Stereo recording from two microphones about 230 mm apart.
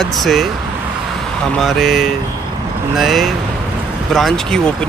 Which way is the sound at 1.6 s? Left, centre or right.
Centre.